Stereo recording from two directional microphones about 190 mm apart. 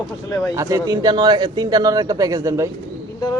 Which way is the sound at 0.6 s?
15° right (ahead or behind).